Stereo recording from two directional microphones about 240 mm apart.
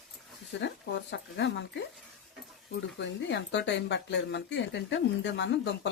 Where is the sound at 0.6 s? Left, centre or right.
Left.